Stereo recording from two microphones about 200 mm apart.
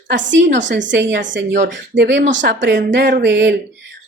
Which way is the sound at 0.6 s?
65° right (ahead or behind).